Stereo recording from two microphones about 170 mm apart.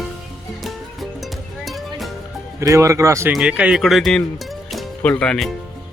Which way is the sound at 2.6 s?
20° right (ahead or behind).